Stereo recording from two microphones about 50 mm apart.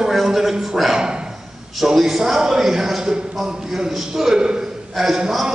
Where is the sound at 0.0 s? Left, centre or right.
Centre.